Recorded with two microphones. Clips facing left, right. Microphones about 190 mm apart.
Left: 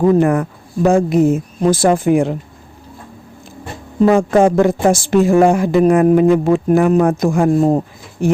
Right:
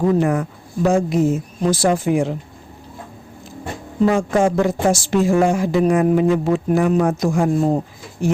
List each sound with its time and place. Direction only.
0.0 s speech: 55° left (ahead or behind)
4.0 s speech: 55° left (ahead or behind)